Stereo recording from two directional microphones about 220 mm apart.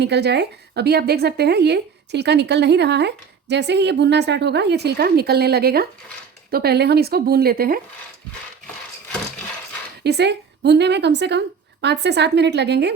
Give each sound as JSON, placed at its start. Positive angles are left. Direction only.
{"t": 0.0, "sound": "speech", "side_deg": -50}
{"t": 10.0, "sound": "speech", "side_deg": -50}